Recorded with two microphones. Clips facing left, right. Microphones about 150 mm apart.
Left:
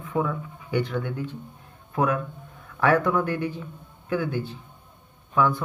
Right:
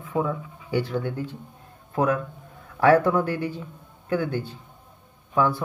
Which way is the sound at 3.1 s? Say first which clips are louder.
Right 1 dB; 35° right (ahead or behind).